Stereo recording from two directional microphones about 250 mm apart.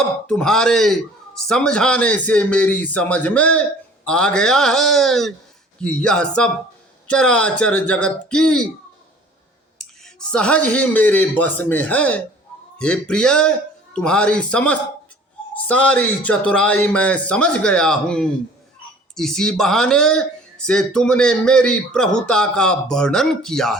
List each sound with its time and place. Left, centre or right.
0.3 s a man's voice: centre
10.0 s a man's voice: centre